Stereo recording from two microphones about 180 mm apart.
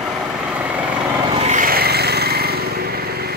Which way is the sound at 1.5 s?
50° right (ahead or behind).